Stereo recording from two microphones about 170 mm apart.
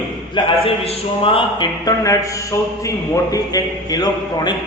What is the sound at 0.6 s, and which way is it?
A man's voice, 30° left (ahead or behind).